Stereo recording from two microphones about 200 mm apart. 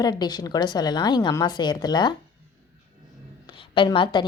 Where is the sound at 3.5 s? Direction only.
25° left (ahead or behind).